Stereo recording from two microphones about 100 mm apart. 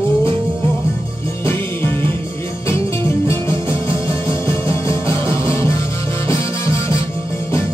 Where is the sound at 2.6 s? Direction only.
25° left (ahead or behind).